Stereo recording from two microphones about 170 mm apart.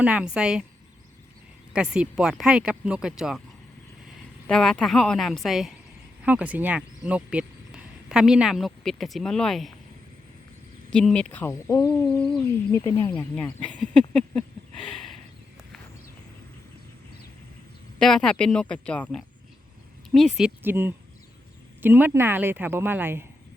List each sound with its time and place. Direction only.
0.0 s speech: 5° right (ahead or behind)
1.7 s speech: 5° right (ahead or behind)
4.4 s speech: 5° left (ahead or behind)
10.9 s speech: 5° left (ahead or behind)
13.3 s a sound: 5° left (ahead or behind)
18.0 s speech: 5° left (ahead or behind)
20.6 s a woman's voice: 10° right (ahead or behind)